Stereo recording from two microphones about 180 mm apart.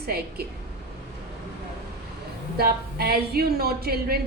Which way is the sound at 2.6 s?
60° right (ahead or behind).